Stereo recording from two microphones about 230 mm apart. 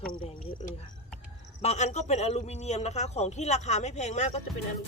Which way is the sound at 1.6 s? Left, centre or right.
Left.